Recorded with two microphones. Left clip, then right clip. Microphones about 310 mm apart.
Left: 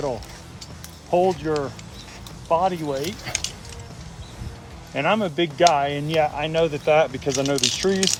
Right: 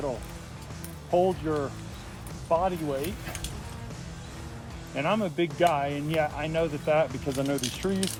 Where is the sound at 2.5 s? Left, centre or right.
Left.